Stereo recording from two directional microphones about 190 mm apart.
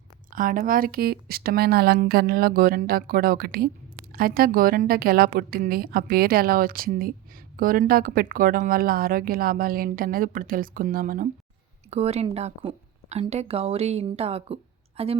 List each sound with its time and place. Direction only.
0.3 s speech: 45° right (ahead or behind)
11.9 s speech: 35° right (ahead or behind)